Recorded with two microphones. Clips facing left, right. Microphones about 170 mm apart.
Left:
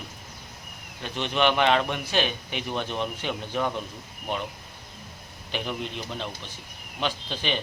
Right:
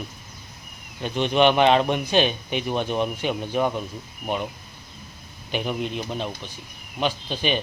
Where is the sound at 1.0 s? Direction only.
15° right (ahead or behind).